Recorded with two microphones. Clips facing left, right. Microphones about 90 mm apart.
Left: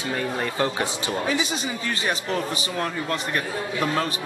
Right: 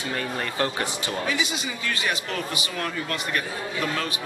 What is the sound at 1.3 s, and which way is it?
A man's voice, 30° left (ahead or behind).